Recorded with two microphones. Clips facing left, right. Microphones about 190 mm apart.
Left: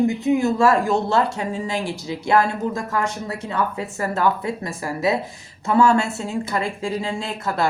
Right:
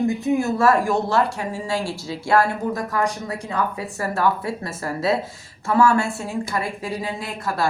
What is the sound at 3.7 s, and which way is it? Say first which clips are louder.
A woman's voice: left 1 dB; 20° left (ahead or behind).